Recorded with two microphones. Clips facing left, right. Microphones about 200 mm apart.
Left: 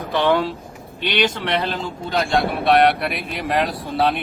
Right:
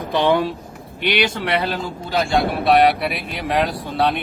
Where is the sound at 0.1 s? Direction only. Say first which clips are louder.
Right 1 dB; 15° right (ahead or behind).